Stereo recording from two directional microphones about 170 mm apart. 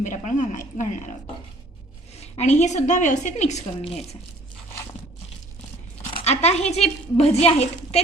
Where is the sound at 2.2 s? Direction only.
40° left (ahead or behind).